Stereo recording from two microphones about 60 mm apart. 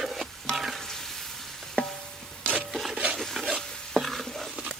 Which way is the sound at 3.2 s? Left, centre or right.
Centre.